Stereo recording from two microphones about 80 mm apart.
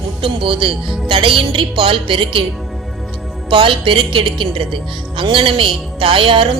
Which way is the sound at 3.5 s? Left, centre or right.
Right.